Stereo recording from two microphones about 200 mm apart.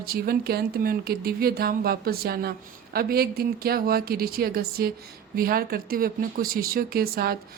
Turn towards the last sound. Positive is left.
turn(degrees=-50)  # may be behind; listen again after turning